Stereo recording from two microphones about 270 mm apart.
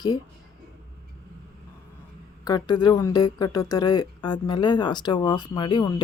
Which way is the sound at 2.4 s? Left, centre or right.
Centre.